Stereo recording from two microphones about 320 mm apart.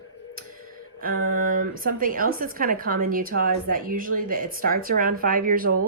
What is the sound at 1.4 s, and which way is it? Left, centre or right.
Speech, right.